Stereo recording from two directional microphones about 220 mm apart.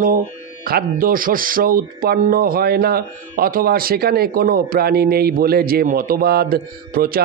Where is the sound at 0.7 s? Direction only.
40° right (ahead or behind).